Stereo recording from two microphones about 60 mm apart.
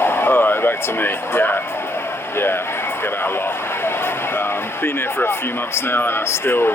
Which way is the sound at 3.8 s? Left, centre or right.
Left.